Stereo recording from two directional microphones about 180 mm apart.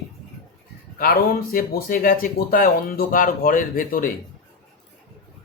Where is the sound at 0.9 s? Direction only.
55° left (ahead or behind).